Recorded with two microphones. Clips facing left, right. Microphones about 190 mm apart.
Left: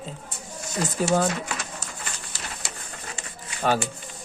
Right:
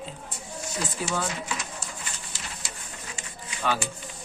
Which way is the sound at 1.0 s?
45° left (ahead or behind).